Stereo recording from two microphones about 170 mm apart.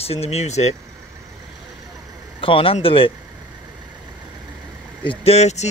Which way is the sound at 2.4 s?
30° left (ahead or behind).